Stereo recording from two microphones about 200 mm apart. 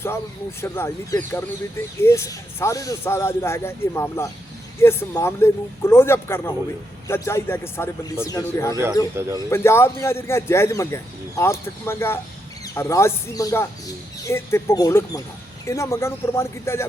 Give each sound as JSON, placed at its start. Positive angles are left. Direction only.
{"t": 0.6, "sound": "a man's voice", "side_deg": 15}
{"t": 9.2, "sound": "speech", "side_deg": -10}
{"t": 9.5, "sound": "a man's voice", "side_deg": 10}